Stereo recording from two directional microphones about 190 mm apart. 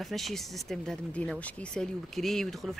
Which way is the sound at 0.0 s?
Centre (ahead or behind).